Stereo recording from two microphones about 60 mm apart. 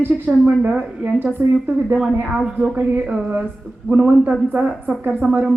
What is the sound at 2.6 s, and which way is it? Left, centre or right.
Speech, right.